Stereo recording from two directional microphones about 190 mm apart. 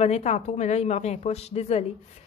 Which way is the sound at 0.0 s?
35° left (ahead or behind).